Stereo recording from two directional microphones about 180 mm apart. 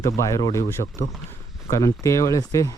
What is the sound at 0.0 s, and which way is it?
Speech, 15° left (ahead or behind).